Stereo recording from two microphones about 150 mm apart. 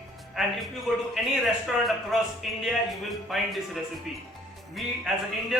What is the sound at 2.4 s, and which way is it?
A man's voice, centre (ahead or behind).